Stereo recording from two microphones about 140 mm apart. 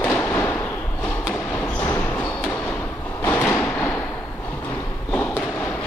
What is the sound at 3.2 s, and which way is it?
Sliding door, 15° left (ahead or behind).